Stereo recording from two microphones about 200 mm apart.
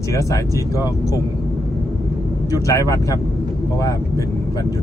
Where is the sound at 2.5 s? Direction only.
15° left (ahead or behind).